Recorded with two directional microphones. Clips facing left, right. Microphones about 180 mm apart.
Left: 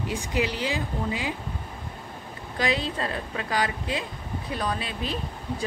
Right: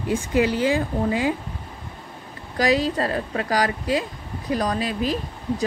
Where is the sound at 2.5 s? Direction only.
40° right (ahead or behind).